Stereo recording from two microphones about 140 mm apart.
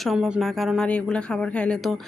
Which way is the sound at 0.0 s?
Centre (ahead or behind).